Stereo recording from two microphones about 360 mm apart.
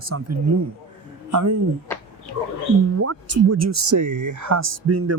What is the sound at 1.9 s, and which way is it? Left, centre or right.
Speech, centre.